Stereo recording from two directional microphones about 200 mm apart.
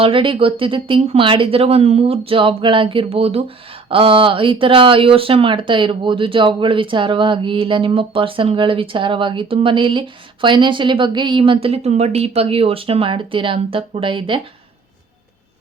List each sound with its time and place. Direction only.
0.0 s speech: 25° right (ahead or behind)